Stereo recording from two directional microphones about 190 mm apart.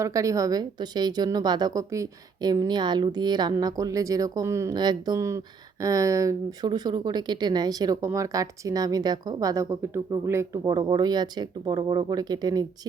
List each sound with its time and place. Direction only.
0.0 s speech: 15° right (ahead or behind)